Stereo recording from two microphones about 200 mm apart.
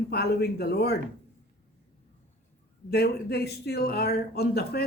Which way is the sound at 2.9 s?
55° left (ahead or behind).